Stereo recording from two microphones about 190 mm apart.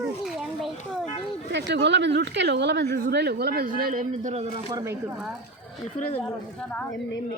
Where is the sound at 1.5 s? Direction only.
65° right (ahead or behind); by 4.4 s 40° right (ahead or behind).